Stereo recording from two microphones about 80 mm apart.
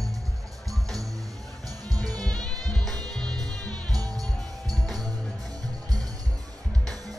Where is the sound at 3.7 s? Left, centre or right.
Right.